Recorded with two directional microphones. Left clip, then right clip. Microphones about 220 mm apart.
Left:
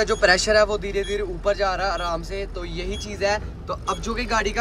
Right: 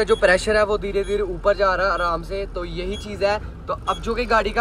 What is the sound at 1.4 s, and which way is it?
Speech, 10° left (ahead or behind).